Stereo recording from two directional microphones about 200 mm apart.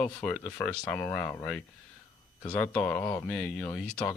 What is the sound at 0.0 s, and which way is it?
Speech, 5° left (ahead or behind).